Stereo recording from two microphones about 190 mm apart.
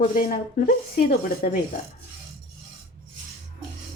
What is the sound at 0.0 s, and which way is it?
Speech, 45° left (ahead or behind).